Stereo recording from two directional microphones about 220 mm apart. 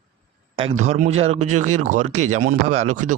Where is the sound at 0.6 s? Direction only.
30° right (ahead or behind).